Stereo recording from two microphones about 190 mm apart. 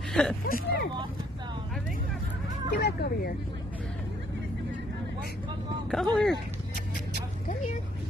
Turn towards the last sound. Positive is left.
turn(degrees=5)  # may be behind; listen again after turning